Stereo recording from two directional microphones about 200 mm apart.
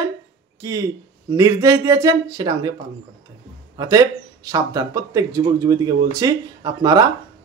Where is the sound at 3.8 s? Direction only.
15° right (ahead or behind).